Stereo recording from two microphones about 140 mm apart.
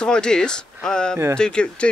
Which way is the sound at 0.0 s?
5° left (ahead or behind).